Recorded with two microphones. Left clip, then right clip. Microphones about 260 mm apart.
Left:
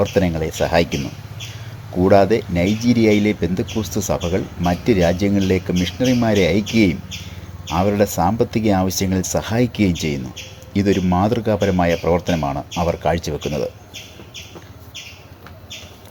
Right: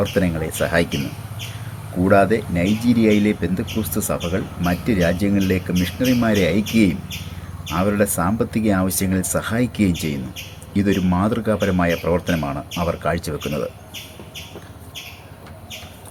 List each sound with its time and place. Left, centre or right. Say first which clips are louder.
0.0 s speech: left 3 dB; left
2.0 s speech: left 2 dB; left